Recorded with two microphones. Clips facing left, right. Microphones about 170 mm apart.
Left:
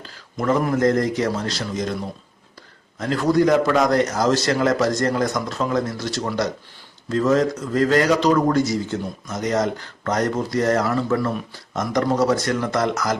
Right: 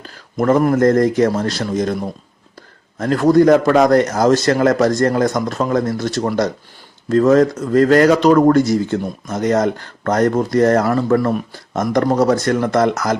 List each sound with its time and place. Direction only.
0.0 s speech: 50° right (ahead or behind)
3.0 s speech: 50° right (ahead or behind)